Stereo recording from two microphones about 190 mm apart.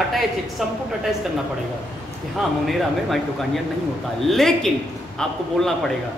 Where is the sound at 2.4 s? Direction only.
Centre (ahead or behind).